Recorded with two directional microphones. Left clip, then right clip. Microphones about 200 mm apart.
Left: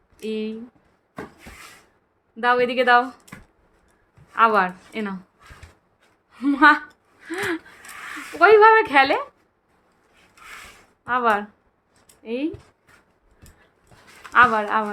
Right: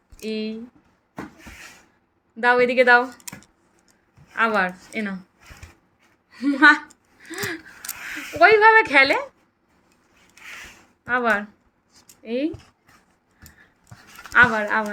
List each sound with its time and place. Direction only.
0.2 s a woman's voice: 10° left (ahead or behind)
2.3 s a woman's voice: 10° left (ahead or behind)
4.4 s a woman's voice: 15° left (ahead or behind)
6.3 s a woman's voice: 15° left (ahead or behind)
7.3 s a sound: 15° left (ahead or behind)
8.4 s a woman's voice: 15° left (ahead or behind)
11.0 s speech: 15° left (ahead or behind)
14.3 s a woman's voice: 10° left (ahead or behind)